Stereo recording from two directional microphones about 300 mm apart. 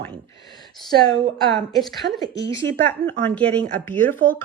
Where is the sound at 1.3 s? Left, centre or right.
Centre.